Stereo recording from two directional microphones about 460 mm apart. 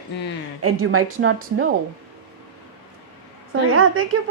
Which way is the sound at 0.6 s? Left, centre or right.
Right.